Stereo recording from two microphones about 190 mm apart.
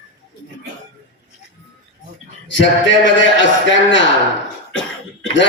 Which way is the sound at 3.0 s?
75° left (ahead or behind).